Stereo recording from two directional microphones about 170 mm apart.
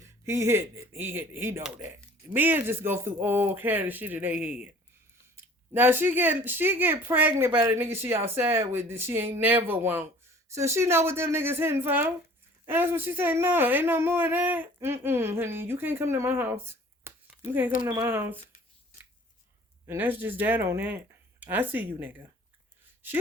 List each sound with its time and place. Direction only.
0.3 s speech: 15° right (ahead or behind)
5.7 s speech: 10° right (ahead or behind)
19.9 s speech: 10° right (ahead or behind)